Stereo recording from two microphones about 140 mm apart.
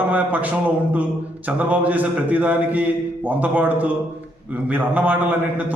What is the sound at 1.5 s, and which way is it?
A man's voice, 10° right (ahead or behind).